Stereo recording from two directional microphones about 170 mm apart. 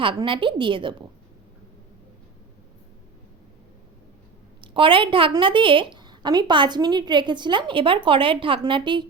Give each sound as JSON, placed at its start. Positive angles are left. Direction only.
{"t": 0.0, "sound": "a woman's voice", "side_deg": -30}
{"t": 4.6, "sound": "a woman's voice", "side_deg": -30}